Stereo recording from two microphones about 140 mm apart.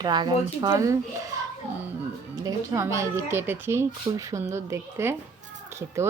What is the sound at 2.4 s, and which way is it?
Speech, 20° right (ahead or behind).